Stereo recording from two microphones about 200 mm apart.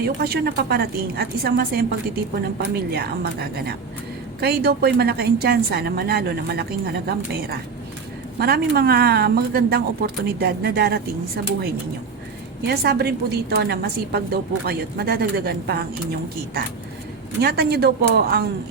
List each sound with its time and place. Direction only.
0.2 s a woman's voice: 50° right (ahead or behind)
8.4 s a woman's voice: 50° right (ahead or behind)
12.6 s a woman's voice: 55° right (ahead or behind)
17.4 s a woman's voice: 50° right (ahead or behind)